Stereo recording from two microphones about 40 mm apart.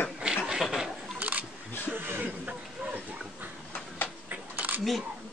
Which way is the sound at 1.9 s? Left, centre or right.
Right.